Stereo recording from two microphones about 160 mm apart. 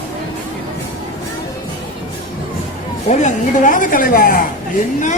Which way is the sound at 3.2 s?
55° left (ahead or behind).